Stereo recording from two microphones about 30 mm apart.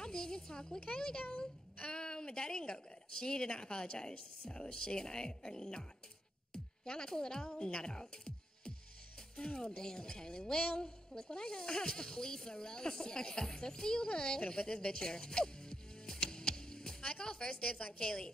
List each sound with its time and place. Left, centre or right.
0.0 s music: left
1.8 s a woman's voice: left
9.4 s a woman's voice: left
16.3 s chop: left
17.2 s a woman's voice: left